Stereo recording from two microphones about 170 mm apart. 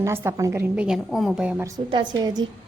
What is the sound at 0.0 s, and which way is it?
A woman's voice, 15° right (ahead or behind).